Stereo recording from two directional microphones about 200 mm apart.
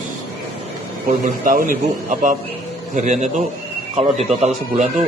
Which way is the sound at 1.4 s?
45° right (ahead or behind).